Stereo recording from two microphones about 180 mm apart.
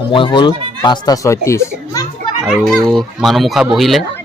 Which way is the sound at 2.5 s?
Centre (ahead or behind).